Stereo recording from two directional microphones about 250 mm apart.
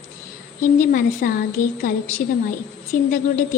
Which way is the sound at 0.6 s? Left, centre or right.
Left.